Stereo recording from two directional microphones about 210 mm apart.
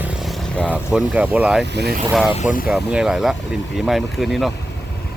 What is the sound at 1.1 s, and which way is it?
Speech, 5° right (ahead or behind).